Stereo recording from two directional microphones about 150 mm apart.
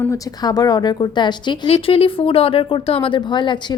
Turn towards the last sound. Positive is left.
turn(degrees=30)  # may be behind; listen again after turning